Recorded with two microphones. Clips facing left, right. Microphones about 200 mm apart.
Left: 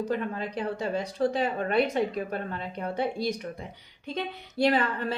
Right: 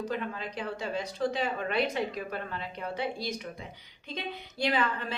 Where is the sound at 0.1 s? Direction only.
45° left (ahead or behind).